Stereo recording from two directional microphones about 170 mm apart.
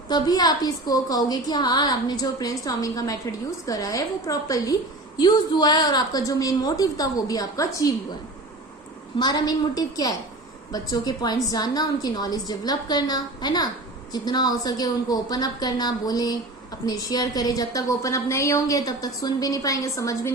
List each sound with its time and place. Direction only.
0.1 s a woman's voice: 25° left (ahead or behind)
9.1 s a woman's voice: 25° left (ahead or behind)